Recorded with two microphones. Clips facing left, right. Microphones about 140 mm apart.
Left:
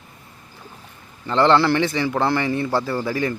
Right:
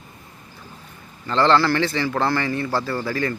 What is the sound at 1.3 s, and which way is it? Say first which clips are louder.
Speech: left 1 dB; 20° left (ahead or behind).